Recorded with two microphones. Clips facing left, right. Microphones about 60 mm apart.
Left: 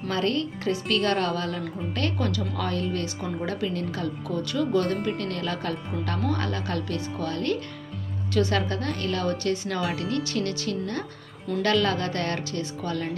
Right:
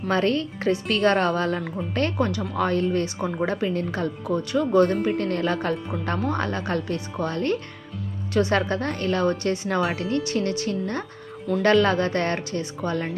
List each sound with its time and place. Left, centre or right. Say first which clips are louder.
0.1 s speech: right 4 dB; right